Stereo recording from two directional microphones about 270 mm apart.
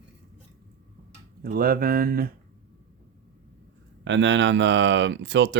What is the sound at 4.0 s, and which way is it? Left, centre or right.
Speech, right.